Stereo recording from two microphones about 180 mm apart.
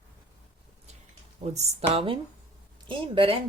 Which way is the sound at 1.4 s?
35° right (ahead or behind).